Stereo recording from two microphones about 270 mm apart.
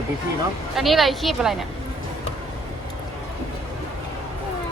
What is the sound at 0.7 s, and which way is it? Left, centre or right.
Speech, centre.